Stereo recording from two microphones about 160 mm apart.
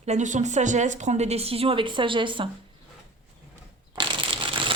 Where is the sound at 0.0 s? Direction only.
45° right (ahead or behind); by 2.5 s 30° right (ahead or behind).